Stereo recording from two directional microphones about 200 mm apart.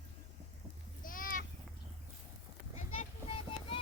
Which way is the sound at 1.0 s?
45° left (ahead or behind).